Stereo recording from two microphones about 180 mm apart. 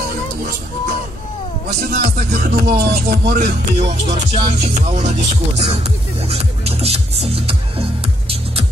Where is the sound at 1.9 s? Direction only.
55° right (ahead or behind).